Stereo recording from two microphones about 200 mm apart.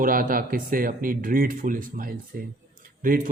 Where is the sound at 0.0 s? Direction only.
45° right (ahead or behind).